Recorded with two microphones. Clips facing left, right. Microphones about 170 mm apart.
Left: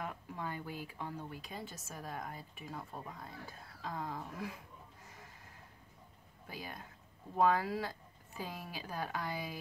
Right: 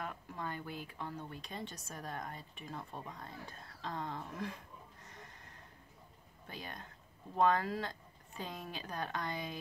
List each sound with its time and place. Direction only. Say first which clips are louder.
0.0 s speech: left 1 dB; 10° left (ahead or behind)
6.4 s speech: left 1 dB; 5° left (ahead or behind)